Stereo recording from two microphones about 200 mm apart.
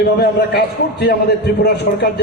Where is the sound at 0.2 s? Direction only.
55° left (ahead or behind).